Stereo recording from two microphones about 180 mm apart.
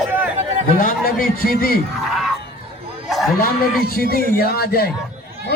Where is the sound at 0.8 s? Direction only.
50° left (ahead or behind).